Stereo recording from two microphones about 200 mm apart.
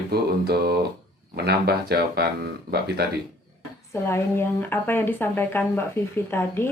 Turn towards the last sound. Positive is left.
turn(degrees=10)  # may be behind; listen again after turning